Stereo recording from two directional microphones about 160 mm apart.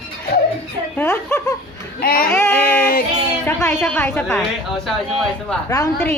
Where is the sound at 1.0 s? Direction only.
10° left (ahead or behind).